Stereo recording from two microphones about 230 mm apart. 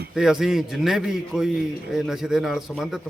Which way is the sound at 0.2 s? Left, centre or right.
Centre.